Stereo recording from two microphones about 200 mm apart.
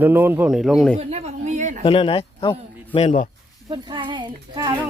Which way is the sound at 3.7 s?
25° right (ahead or behind).